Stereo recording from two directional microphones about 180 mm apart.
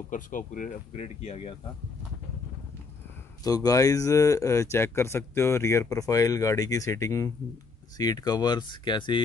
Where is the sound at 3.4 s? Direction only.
20° left (ahead or behind).